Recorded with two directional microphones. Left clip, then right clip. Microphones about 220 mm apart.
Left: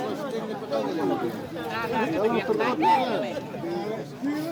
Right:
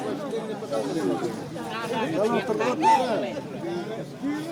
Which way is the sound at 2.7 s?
25° right (ahead or behind).